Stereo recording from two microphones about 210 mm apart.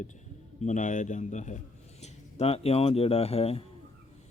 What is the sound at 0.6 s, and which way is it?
A man's voice, 35° left (ahead or behind).